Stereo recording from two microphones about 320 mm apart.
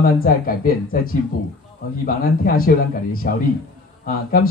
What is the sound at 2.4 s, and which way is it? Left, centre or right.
A man's voice, left.